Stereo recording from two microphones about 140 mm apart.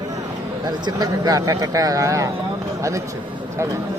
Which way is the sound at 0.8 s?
25° right (ahead or behind).